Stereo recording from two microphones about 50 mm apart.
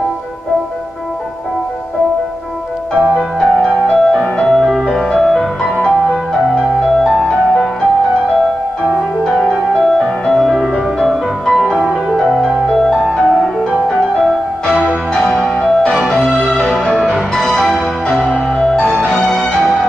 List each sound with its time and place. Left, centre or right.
3.3 s music: centre
9.3 s music: centre
12.6 s music: centre
15.2 s music: centre
15.6 s music: centre
16.4 s music: centre